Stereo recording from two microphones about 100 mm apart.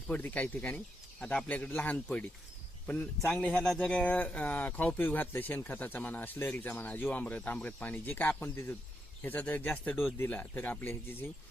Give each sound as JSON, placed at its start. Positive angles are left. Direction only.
{"t": 0.1, "sound": "speech", "side_deg": 15}